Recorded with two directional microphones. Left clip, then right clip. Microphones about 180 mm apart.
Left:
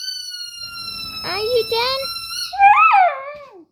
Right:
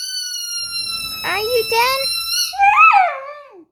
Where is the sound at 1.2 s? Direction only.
10° right (ahead or behind).